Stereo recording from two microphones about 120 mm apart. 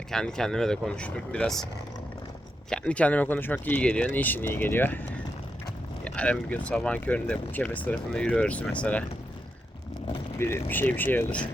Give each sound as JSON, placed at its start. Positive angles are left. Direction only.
{"t": 0.1, "sound": "speech", "side_deg": 5}
{"t": 2.6, "sound": "speech", "side_deg": 10}
{"t": 10.3, "sound": "speech", "side_deg": 20}